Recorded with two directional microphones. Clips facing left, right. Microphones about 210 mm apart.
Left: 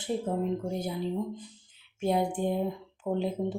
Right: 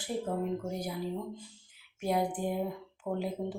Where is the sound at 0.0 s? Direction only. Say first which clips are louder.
Left 3 dB; 25° left (ahead or behind).